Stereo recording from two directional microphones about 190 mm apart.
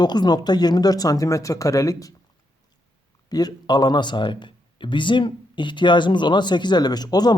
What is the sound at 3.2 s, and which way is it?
Speech, 20° left (ahead or behind).